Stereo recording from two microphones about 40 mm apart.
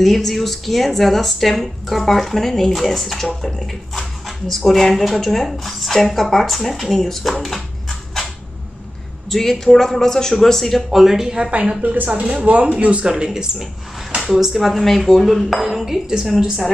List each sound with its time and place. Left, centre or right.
0.0 s a woman's voice: centre
9.3 s a man's voice: centre
11.0 s speech: centre
11.8 s a woman's voice: right
12.2 s speech: right
13.1 s speech: centre
14.3 s a woman's voice: centre
15.6 s speech: centre